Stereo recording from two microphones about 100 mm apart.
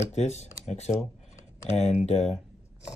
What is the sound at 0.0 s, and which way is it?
Speech, 90° left.